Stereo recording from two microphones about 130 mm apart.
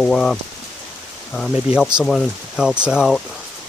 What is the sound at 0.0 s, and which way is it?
Speech, 5° left (ahead or behind).